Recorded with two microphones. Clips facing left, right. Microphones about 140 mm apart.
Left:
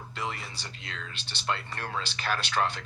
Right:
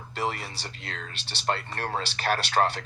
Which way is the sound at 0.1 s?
60° right (ahead or behind).